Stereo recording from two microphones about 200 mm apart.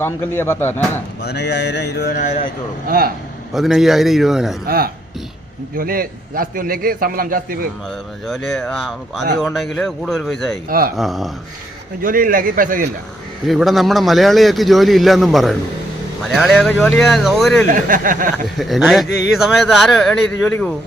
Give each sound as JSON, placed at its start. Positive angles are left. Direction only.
{"t": 0.0, "sound": "speech", "side_deg": 10}
{"t": 1.2, "sound": "a sound", "side_deg": 55}
{"t": 2.8, "sound": "a man's voice", "side_deg": -50}
{"t": 3.5, "sound": "a man's voice", "side_deg": 0}
{"t": 4.6, "sound": "a man's voice", "side_deg": -50}
{"t": 8.3, "sound": "a man's voice", "side_deg": 0}
{"t": 10.7, "sound": "a man's voice", "side_deg": -45}
{"t": 10.9, "sound": "a man's voice", "side_deg": 0}
{"t": 12.0, "sound": "a man's voice", "side_deg": -45}
{"t": 13.5, "sound": "a man's voice", "side_deg": 0}
{"t": 17.7, "sound": "a man's voice", "side_deg": -45}
{"t": 18.4, "sound": "a man's voice", "side_deg": 0}